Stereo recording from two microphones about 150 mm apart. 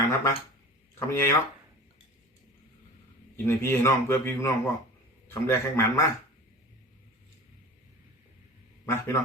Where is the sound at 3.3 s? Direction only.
15° left (ahead or behind).